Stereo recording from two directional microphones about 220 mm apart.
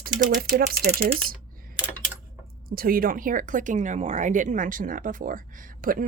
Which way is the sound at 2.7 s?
40° right (ahead or behind).